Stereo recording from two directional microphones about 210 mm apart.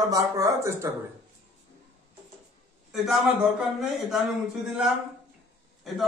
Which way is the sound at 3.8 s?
Centre (ahead or behind).